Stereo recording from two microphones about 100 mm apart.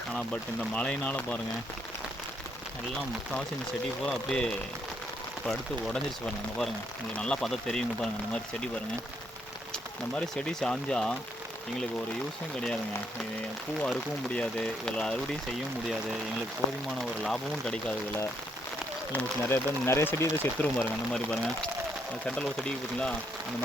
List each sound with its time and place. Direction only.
0.7 s speech: 10° left (ahead or behind)
4.0 s speech: 5° left (ahead or behind)
10.2 s speech: 10° left (ahead or behind)
13.8 s speech: 10° left (ahead or behind)
17.2 s speech: 5° left (ahead or behind)
19.1 s speech: 20° left (ahead or behind)
20.7 s speech: 10° left (ahead or behind)